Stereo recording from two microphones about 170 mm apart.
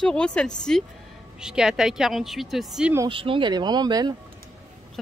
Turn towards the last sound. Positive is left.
turn(degrees=-25)  # may be behind; listen again after turning